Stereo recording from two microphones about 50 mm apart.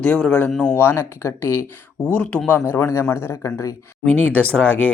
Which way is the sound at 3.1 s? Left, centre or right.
Left.